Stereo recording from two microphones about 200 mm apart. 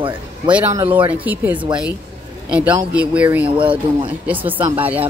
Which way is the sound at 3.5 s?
25° right (ahead or behind).